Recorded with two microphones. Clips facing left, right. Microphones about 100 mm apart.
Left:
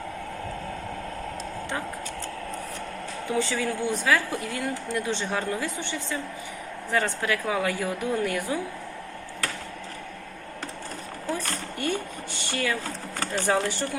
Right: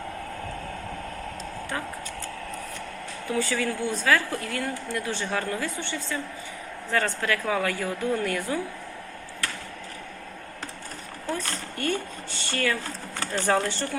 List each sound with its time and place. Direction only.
3.2 s a woman's voice: 20° left (ahead or behind)
11.3 s a woman's voice: 15° left (ahead or behind)